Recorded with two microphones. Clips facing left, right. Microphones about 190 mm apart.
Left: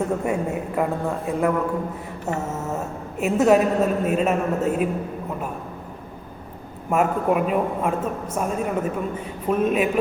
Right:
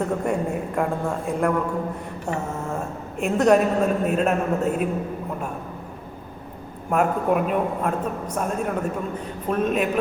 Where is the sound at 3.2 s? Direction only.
5° left (ahead or behind).